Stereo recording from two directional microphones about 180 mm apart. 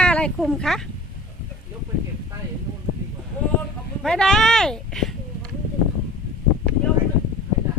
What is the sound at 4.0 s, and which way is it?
Speech, 5° left (ahead or behind).